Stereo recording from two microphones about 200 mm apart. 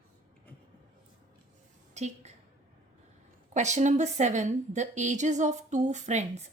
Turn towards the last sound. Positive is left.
turn(degrees=-35)  # may be behind; listen again after turning